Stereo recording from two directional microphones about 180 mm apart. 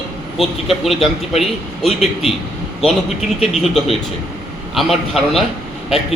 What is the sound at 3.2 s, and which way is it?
A man's voice, centre (ahead or behind).